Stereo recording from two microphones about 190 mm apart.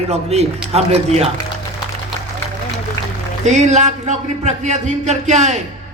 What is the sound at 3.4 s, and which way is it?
A man's voice, 35° right (ahead or behind).